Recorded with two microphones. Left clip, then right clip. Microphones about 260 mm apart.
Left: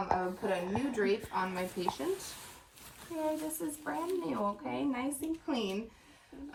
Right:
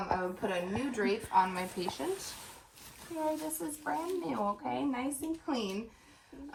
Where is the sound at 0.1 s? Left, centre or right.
Centre.